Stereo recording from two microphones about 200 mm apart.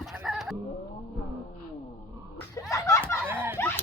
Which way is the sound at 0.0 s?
Centre (ahead or behind).